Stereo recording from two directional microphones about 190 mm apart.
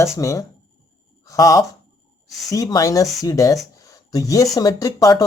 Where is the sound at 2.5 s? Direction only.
20° left (ahead or behind).